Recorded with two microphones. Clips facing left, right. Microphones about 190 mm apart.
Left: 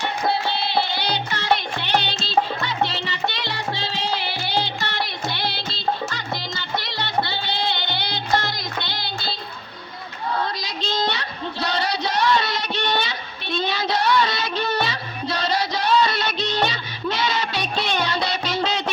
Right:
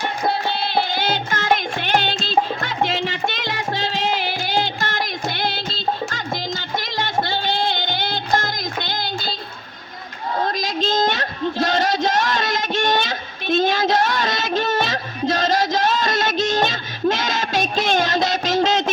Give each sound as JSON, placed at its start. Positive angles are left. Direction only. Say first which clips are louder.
{"t": 0.9, "sound": "music", "louder": "right 3 dB", "side_deg": -45}
{"t": 2.6, "sound": "music", "louder": "right 3 dB", "side_deg": -45}
{"t": 10.6, "sound": "a sound", "louder": "right 5 dB", "side_deg": -45}